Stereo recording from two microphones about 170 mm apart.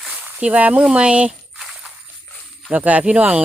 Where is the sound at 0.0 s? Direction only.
5° right (ahead or behind).